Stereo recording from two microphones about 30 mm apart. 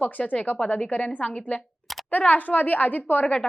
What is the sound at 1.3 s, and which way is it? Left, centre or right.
Speech, left.